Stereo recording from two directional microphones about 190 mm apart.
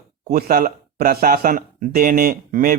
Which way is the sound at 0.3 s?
50° right (ahead or behind).